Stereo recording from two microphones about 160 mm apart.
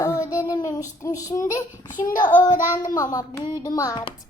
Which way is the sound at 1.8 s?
55° left (ahead or behind).